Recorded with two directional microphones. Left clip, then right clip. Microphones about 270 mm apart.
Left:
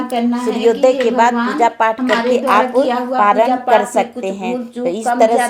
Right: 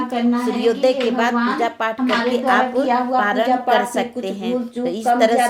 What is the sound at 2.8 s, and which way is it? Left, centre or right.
Speech, left.